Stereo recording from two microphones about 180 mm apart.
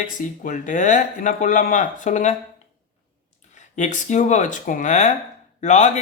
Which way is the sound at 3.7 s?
40° left (ahead or behind).